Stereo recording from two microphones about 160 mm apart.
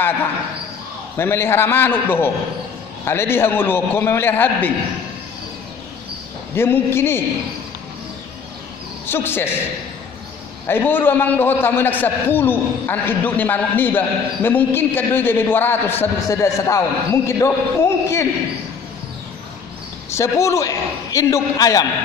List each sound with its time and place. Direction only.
1.1 s a man's voice: 15° left (ahead or behind)
6.5 s a man's voice: 15° left (ahead or behind)
9.0 s a man's voice: 15° left (ahead or behind)
10.7 s a man's voice: 10° left (ahead or behind)
20.1 s a man's voice: 20° left (ahead or behind)